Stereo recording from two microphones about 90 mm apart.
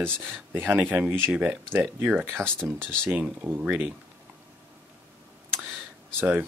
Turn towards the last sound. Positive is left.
turn(degrees=-20)  # may be behind; listen again after turning